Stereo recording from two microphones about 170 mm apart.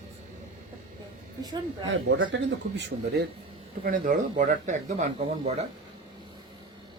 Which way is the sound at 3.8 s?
55° right (ahead or behind).